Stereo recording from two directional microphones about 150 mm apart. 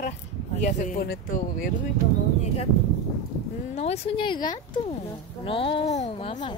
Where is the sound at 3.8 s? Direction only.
40° left (ahead or behind).